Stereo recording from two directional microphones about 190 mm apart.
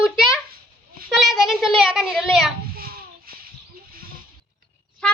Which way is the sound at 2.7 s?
50° right (ahead or behind).